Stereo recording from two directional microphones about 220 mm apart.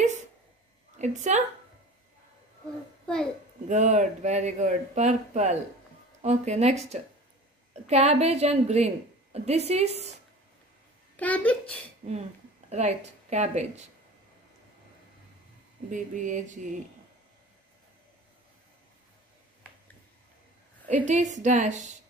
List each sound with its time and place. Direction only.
0.9 s a woman's voice: 35° right (ahead or behind)
3.6 s a woman's voice: 35° right (ahead or behind)
11.1 s speech: 5° left (ahead or behind)
12.1 s a sound: 30° right (ahead or behind)
13.3 s speech: 30° right (ahead or behind)
15.9 s speech: 35° right (ahead or behind)
20.9 s speech: 35° right (ahead or behind)